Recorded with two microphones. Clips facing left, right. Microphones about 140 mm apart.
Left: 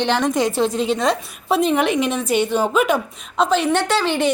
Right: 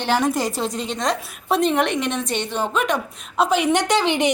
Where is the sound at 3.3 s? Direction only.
10° right (ahead or behind).